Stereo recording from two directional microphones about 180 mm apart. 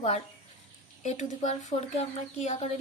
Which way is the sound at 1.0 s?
40° left (ahead or behind).